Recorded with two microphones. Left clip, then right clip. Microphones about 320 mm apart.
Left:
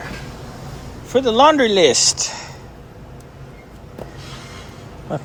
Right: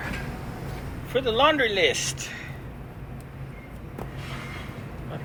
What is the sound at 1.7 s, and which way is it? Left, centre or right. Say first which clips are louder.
Speech: left 9 dB; left.